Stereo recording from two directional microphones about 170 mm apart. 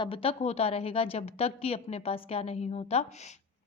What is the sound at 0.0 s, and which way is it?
A woman's voice, 35° left (ahead or behind).